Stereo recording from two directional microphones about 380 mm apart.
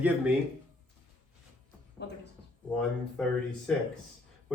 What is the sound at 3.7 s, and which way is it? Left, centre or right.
Speech, centre.